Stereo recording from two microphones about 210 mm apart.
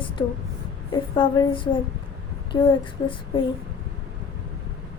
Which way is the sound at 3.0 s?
20° left (ahead or behind).